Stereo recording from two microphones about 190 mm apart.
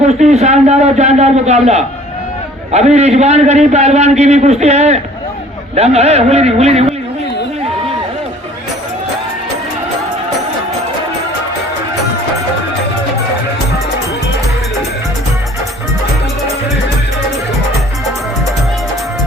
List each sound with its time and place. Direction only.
0.0 s a man's voice: 35° right (ahead or behind)